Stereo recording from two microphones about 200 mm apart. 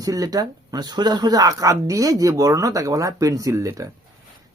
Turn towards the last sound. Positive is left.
turn(degrees=-15)  # may be behind; listen again after turning